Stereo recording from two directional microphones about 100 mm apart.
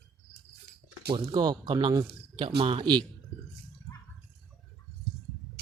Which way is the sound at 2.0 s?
60° right (ahead or behind).